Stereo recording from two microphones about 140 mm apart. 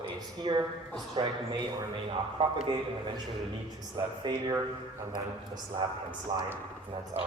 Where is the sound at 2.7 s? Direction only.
30° right (ahead or behind).